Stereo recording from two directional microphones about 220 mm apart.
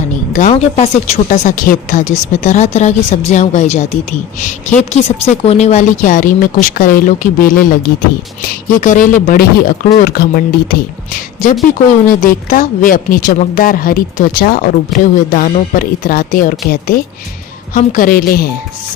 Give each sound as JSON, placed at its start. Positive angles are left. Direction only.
{"t": 0.3, "sound": "a woman's voice", "side_deg": 30}
{"t": 8.8, "sound": "a woman's voice", "side_deg": 35}
{"t": 12.0, "sound": "a woman's voice", "side_deg": 40}